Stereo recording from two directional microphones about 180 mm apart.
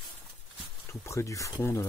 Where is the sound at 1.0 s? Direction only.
15° left (ahead or behind).